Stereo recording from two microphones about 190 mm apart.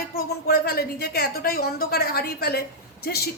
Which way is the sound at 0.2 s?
55° left (ahead or behind).